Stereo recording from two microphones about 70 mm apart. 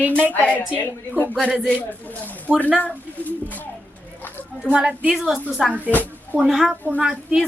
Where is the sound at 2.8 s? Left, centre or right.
Left.